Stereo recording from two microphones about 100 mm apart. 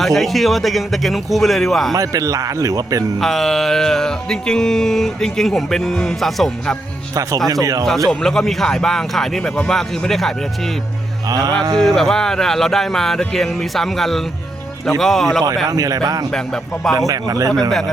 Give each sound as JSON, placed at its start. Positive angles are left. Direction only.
{"t": 0.0, "sound": "music", "side_deg": 0}
{"t": 1.9, "sound": "speech", "side_deg": -35}
{"t": 3.2, "sound": "music", "side_deg": 0}
{"t": 7.1, "sound": "speech", "side_deg": -35}
{"t": 7.9, "sound": "music", "side_deg": 5}
{"t": 11.3, "sound": "speech", "side_deg": -40}
{"t": 11.8, "sound": "music", "side_deg": 5}
{"t": 15.6, "sound": "speech", "side_deg": -35}
{"t": 16.3, "sound": "music", "side_deg": 5}
{"t": 17.1, "sound": "speech", "side_deg": -35}
{"t": 17.7, "sound": "music", "side_deg": 5}